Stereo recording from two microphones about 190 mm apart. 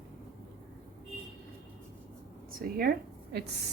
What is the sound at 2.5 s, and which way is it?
Speech, 50° right (ahead or behind).